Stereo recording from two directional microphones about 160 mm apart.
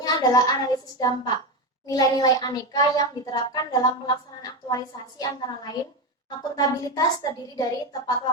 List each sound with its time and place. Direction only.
0.0 s speech: 25° left (ahead or behind)